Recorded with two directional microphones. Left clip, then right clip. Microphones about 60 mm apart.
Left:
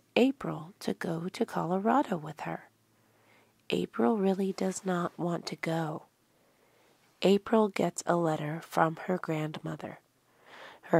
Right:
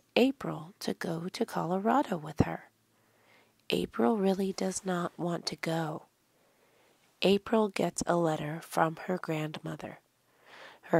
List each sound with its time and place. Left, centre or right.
0.1 s speech: centre
7.2 s speech: centre